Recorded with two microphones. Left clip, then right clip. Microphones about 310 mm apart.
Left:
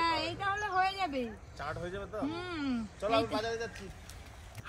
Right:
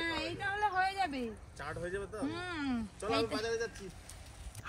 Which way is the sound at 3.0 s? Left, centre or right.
Centre.